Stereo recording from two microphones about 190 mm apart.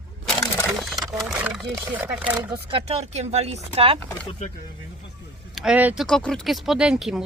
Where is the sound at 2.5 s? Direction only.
30° right (ahead or behind).